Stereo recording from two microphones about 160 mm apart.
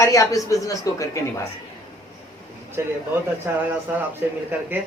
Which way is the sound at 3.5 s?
15° right (ahead or behind).